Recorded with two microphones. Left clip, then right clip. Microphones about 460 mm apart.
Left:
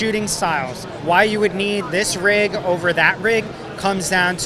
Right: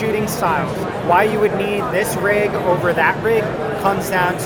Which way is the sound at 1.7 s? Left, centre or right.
Left.